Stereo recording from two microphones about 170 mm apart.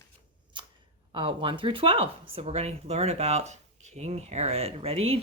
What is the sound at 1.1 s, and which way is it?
Speech, 30° right (ahead or behind).